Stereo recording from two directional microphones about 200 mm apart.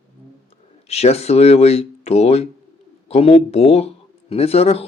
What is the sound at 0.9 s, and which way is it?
Speech, 30° left (ahead or behind).